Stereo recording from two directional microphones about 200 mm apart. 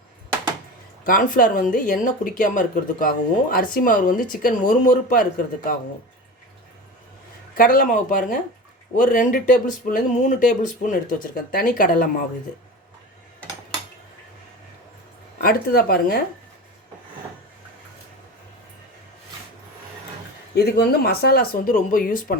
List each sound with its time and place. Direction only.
1.0 s speech: 45° left (ahead or behind)
7.5 s speech: 45° left (ahead or behind)
15.4 s speech: 50° left (ahead or behind)
20.6 s speech: 55° left (ahead or behind)